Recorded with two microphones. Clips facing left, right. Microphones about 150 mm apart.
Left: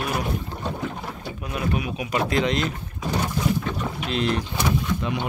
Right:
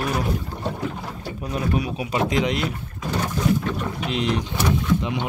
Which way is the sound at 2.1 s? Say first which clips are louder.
Even; 15° right (ahead or behind).